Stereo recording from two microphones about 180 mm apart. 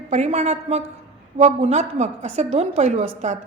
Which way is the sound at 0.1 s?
35° right (ahead or behind).